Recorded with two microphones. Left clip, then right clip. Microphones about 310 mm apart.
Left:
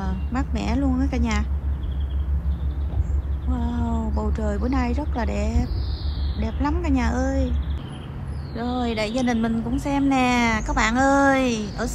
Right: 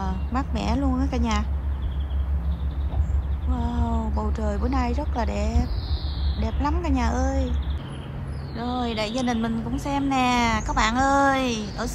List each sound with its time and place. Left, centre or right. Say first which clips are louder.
0.0 s a woman's voice: right 1 dB; centre
3.5 s a woman's voice: even; centre
8.5 s a woman's voice: left 2 dB; centre